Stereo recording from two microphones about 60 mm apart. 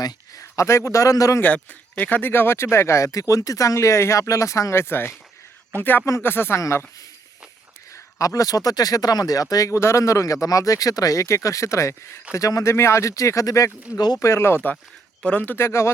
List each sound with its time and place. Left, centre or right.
0.0 s speech: left
1.4 s speech: left
4.8 s speech: left
6.6 s speech: left
7.9 s speech: left
9.7 s speech: left
12.3 s speech: left
12.6 s speech: left